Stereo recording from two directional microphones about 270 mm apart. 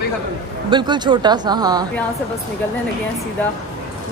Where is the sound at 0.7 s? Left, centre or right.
Centre.